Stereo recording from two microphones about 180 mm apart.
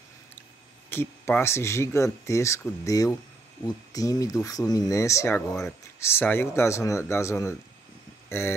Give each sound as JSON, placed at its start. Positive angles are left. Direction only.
{"t": 0.8, "sound": "speech", "side_deg": 10}